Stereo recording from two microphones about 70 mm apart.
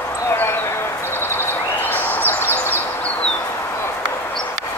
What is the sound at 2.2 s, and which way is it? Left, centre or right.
Bird, right.